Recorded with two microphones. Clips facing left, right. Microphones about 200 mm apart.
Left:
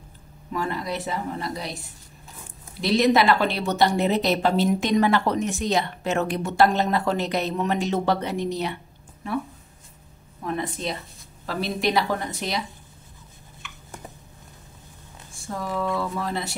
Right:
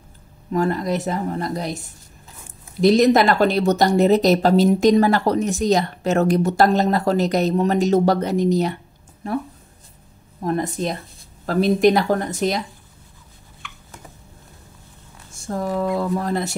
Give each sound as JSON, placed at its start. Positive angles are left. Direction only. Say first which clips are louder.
{"t": 0.5, "sound": "a woman's voice", "louder": "right 7 dB", "side_deg": -45}
{"t": 10.4, "sound": "a woman's voice", "louder": "right 6 dB", "side_deg": -40}
{"t": 15.3, "sound": "a woman's voice", "louder": "right 5 dB", "side_deg": -45}